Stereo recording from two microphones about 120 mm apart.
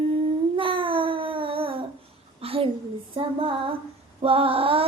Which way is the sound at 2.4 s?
50° right (ahead or behind).